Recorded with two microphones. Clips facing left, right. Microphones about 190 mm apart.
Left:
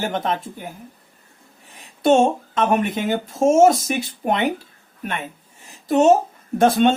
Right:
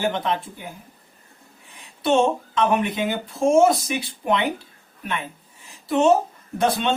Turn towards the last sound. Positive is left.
turn(degrees=50)  # may be behind; listen again after turning